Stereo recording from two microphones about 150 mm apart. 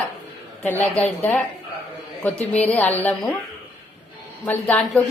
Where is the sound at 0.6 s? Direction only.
10° left (ahead or behind).